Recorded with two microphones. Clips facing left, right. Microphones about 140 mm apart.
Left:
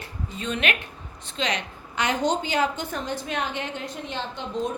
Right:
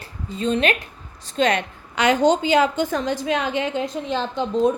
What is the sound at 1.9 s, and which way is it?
A woman's voice, 90° right.